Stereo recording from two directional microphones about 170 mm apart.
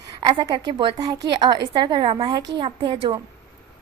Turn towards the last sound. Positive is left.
turn(degrees=-30)  # may be behind; listen again after turning